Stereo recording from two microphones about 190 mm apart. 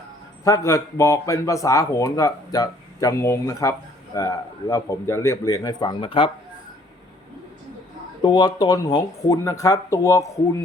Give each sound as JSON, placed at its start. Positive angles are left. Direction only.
{"t": 0.4, "sound": "speech", "side_deg": 15}
{"t": 8.2, "sound": "speech", "side_deg": 20}